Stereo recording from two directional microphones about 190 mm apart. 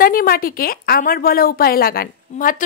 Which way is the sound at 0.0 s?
50° left (ahead or behind).